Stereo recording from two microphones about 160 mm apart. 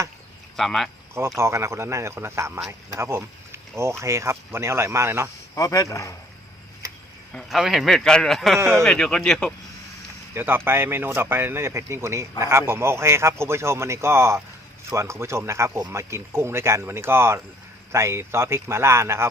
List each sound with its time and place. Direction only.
0.5 s speech: centre (ahead or behind)
1.4 s speech: 15° right (ahead or behind)
5.5 s speech: 20° left (ahead or behind)
7.3 s speech: centre (ahead or behind)
10.3 s speech: 15° right (ahead or behind)